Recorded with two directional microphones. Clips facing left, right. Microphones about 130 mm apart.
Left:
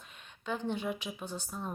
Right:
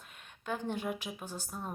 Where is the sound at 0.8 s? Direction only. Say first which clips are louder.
Left 1 dB; 10° right (ahead or behind).